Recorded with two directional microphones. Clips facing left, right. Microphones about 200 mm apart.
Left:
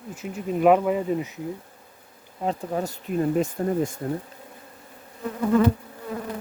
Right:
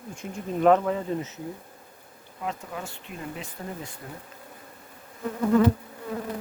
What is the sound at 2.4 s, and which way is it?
Speech, 35° left (ahead or behind).